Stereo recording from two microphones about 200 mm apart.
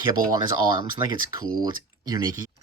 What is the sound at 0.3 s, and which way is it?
Speech, 20° right (ahead or behind).